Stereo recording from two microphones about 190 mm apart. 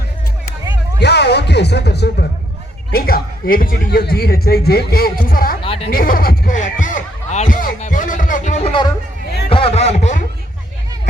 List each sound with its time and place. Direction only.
0.9 s a man's voice: 60° left (ahead or behind)
5.6 s a woman's voice: 30° left (ahead or behind)
5.9 s speech: 50° left (ahead or behind)
9.5 s a sound: 30° left (ahead or behind)